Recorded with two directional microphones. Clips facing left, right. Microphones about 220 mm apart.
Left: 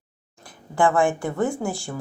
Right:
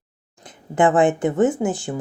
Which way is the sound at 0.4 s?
20° right (ahead or behind).